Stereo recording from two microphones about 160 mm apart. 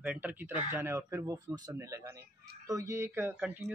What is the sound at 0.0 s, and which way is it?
A man's voice, 10° right (ahead or behind).